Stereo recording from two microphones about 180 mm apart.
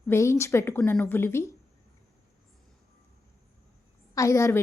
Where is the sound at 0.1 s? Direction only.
15° left (ahead or behind).